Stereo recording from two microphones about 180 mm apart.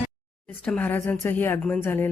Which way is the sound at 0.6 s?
10° left (ahead or behind).